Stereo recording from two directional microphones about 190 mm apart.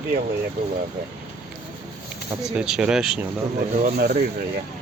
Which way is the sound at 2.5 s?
5° right (ahead or behind).